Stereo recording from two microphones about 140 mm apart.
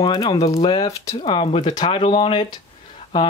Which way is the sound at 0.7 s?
30° left (ahead or behind).